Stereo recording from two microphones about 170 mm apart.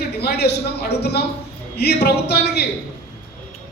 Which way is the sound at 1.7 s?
70° left (ahead or behind).